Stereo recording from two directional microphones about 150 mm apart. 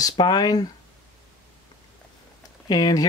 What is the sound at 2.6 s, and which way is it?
Speech, 25° left (ahead or behind).